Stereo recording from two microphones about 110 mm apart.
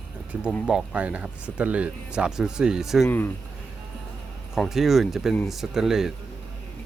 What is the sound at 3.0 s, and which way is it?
Speech, 15° left (ahead or behind).